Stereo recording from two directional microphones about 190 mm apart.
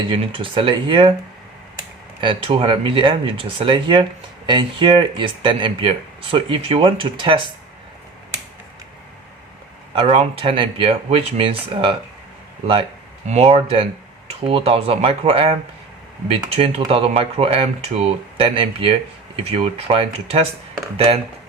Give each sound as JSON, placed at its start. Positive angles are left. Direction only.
{"t": 0.1, "sound": "speech", "side_deg": -25}
{"t": 2.2, "sound": "speech", "side_deg": -25}
{"t": 9.9, "sound": "speech", "side_deg": -30}
{"t": 13.2, "sound": "speech", "side_deg": -35}
{"t": 16.6, "sound": "speech", "side_deg": -30}